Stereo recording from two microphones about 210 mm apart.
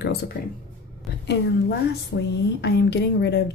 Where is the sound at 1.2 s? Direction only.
55° left (ahead or behind).